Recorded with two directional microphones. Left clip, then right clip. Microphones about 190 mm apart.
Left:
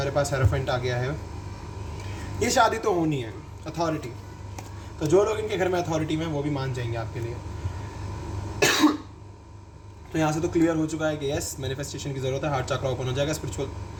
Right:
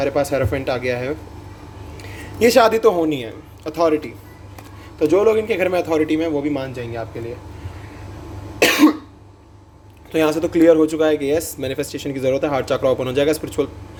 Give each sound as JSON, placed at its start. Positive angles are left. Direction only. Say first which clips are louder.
{"t": 0.0, "sound": "a man's voice", "louder": "right 7 dB", "side_deg": -45}
{"t": 2.4, "sound": "a man's voice", "louder": "right 9 dB", "side_deg": -45}
{"t": 4.9, "sound": "a man's voice", "louder": "right 7 dB", "side_deg": -40}
{"t": 8.5, "sound": "cough", "louder": "right 7 dB", "side_deg": -55}
{"t": 10.1, "sound": "speech", "louder": "right 8 dB", "side_deg": -40}